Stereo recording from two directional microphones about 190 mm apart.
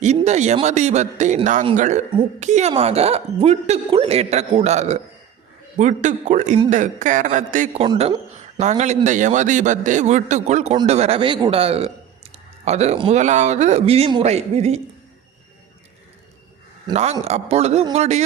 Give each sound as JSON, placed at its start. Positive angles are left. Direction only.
{"t": 0.0, "sound": "a man's voice", "side_deg": -35}
{"t": 16.9, "sound": "a man's voice", "side_deg": -35}